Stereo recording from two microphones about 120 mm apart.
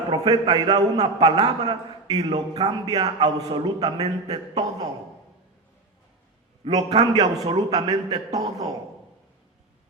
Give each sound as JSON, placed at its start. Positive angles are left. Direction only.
{"t": 0.1, "sound": "a man's voice", "side_deg": -35}
{"t": 6.6, "sound": "a man's voice", "side_deg": -45}
{"t": 7.0, "sound": "a man's voice", "side_deg": -30}